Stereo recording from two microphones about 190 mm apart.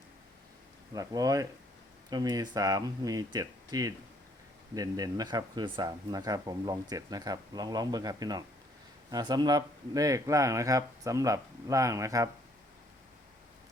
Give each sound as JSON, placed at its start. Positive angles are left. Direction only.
{"t": 0.9, "sound": "speech", "side_deg": -20}